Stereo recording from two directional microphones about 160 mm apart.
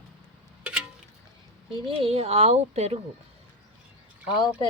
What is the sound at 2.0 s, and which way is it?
Speech, 40° right (ahead or behind).